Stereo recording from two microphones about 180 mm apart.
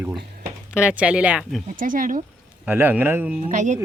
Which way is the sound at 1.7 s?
50° right (ahead or behind).